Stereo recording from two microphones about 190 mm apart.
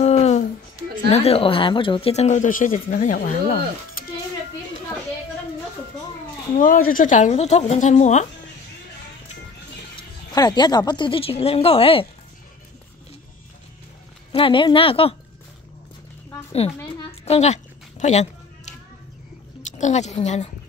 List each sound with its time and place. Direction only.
0.0 s a sound: 35° left (ahead or behind)
1.1 s speech: 30° left (ahead or behind); by 4.0 s 50° left (ahead or behind)
6.5 s speech: 45° left (ahead or behind)
9.9 s speech: 20° left (ahead or behind)
14.3 s a woman's voice: 25° left (ahead or behind)
16.5 s a woman's voice: 30° left (ahead or behind)